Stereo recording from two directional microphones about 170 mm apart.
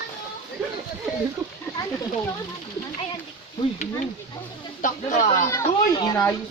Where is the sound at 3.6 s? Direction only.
25° left (ahead or behind).